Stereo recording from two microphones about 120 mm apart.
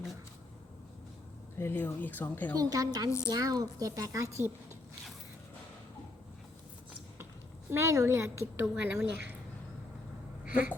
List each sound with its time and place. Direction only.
1.5 s speech: 20° left (ahead or behind)
2.6 s a woman's voice: 30° right (ahead or behind)
7.7 s a woman's voice: 20° right (ahead or behind)
10.4 s speech: 10° right (ahead or behind)